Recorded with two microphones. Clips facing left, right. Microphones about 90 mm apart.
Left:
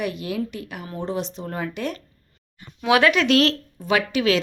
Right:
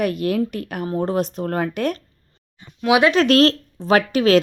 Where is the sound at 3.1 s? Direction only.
40° right (ahead or behind).